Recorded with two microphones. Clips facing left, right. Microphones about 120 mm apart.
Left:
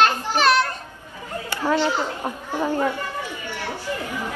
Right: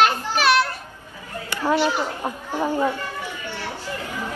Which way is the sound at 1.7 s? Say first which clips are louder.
Right 1 dB; 15° right (ahead or behind).